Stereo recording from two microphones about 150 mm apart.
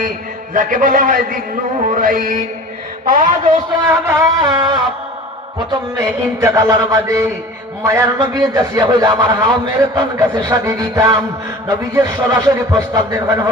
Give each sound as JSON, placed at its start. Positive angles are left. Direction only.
{"t": 0.5, "sound": "a man's voice", "side_deg": -60}
{"t": 3.8, "sound": "a man's voice", "side_deg": -20}